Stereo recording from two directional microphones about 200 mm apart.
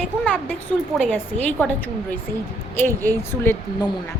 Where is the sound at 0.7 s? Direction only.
5° left (ahead or behind).